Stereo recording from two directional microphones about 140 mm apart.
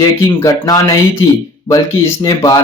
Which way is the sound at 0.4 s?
30° left (ahead or behind).